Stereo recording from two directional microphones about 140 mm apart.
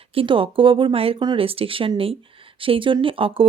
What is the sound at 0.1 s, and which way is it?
Speech, 40° right (ahead or behind).